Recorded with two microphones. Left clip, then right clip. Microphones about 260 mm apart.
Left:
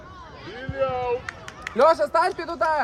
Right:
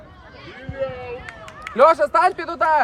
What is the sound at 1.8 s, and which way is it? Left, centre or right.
Speech, right.